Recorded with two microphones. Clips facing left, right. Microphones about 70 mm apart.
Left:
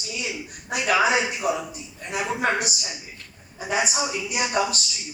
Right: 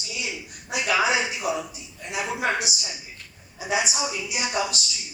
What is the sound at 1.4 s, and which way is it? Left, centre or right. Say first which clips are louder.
Speech: left 2 dB; left.